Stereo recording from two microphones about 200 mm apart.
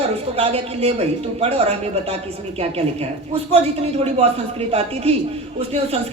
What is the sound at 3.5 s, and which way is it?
Speech, 30° right (ahead or behind).